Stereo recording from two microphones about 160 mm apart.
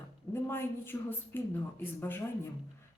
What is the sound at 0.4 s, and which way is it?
A man's voice, 15° left (ahead or behind).